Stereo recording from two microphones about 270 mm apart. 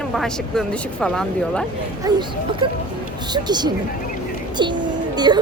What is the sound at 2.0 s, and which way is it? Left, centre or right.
A woman's voice, centre.